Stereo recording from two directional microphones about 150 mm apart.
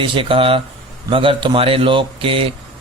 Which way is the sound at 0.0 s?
35° right (ahead or behind).